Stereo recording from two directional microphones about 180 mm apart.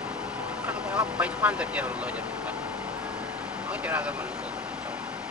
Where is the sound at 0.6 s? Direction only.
10° right (ahead or behind).